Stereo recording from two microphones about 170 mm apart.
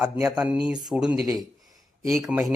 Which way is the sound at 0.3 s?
5° right (ahead or behind).